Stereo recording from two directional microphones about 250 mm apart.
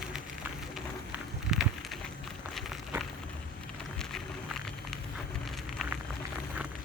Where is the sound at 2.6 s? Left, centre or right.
Centre.